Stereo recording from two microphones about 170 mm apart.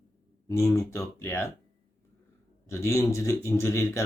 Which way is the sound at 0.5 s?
15° left (ahead or behind).